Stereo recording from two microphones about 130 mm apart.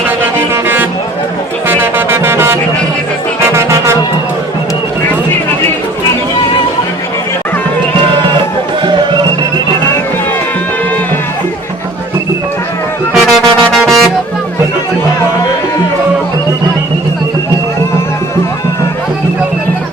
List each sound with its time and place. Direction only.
0.5 s music: 15° right (ahead or behind)
13.1 s music: centre (ahead or behind)